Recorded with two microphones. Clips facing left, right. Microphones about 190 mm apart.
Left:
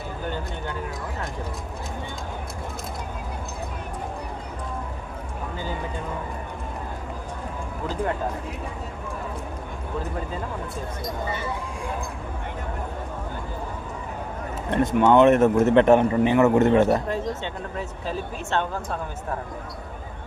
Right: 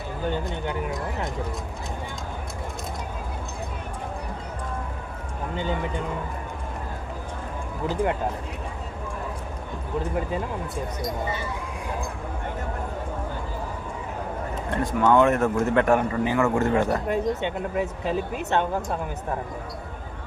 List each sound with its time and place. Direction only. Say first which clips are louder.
0.3 s speech: right 5 dB; 20° right (ahead or behind)
14.7 s a man's voice: left 3 dB; 20° left (ahead or behind)
17.1 s speech: right 3 dB; 15° right (ahead or behind)